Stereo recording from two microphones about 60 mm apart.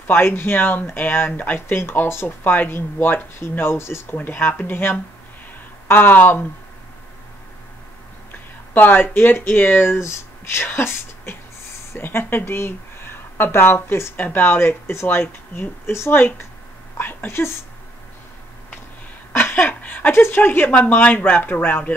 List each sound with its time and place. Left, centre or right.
0.0 s speech: left
1.8 s speech: left
8.3 s speech: left
14.1 s speech: left
19.3 s speech: left
20.7 s speech: left